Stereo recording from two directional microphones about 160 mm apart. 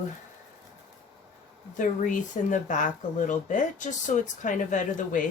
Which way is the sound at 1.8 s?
55° left (ahead or behind).